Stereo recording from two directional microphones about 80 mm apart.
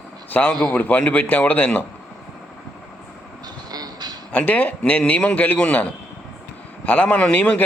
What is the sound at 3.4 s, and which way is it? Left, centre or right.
Vehicle, right.